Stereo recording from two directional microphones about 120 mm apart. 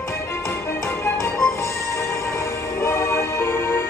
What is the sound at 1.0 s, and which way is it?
Music, 25° left (ahead or behind).